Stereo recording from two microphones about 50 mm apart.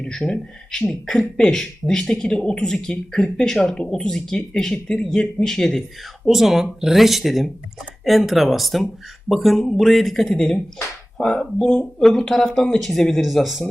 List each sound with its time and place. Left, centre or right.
0.0 s a man's voice: centre
6.2 s a man's voice: centre
11.9 s a man's voice: centre